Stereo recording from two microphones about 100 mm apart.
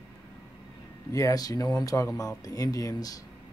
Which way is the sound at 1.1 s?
35° left (ahead or behind).